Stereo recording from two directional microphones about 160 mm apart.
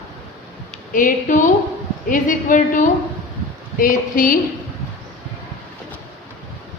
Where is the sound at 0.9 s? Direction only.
55° left (ahead or behind).